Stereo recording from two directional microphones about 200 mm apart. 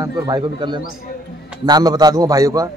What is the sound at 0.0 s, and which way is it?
A man's voice, 20° right (ahead or behind).